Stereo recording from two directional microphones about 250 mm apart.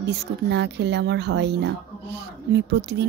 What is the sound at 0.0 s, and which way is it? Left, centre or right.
Speech, right.